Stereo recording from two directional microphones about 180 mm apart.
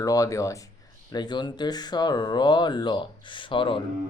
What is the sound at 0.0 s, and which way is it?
Speech, 20° left (ahead or behind).